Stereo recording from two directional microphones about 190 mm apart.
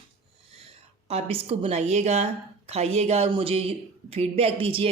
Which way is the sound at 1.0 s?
30° right (ahead or behind).